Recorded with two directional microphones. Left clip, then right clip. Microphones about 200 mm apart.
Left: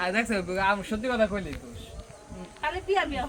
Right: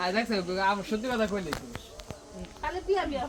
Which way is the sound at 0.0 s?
25° left (ahead or behind).